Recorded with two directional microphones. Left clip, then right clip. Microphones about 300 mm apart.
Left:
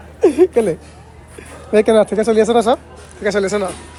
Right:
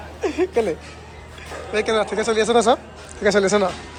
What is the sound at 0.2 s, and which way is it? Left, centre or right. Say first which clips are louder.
Speech: left 8 dB; centre.